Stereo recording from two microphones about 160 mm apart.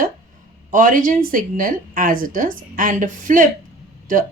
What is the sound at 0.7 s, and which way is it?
Speech, 55° right (ahead or behind).